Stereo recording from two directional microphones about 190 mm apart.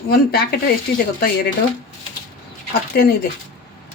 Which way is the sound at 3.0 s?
55° left (ahead or behind).